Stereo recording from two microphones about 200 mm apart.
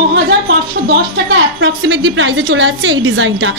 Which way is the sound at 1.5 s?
65° right (ahead or behind).